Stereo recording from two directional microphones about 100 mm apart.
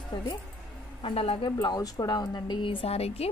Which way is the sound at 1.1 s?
80° left.